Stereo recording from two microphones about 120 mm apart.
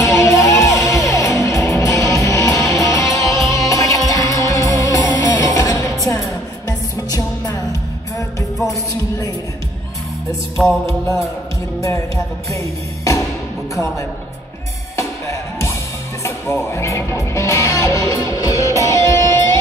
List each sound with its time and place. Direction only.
0.0 s music: 25° left (ahead or behind)
10.6 s music: 5° left (ahead or behind)
15.0 s music: 25° left (ahead or behind)
16.7 s music: 25° left (ahead or behind)
19.2 s music: 35° right (ahead or behind)